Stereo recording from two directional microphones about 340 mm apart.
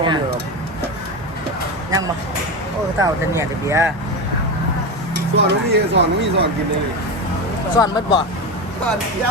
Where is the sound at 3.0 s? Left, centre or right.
Centre.